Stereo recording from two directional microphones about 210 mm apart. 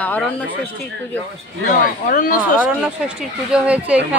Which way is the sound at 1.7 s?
40° left (ahead or behind).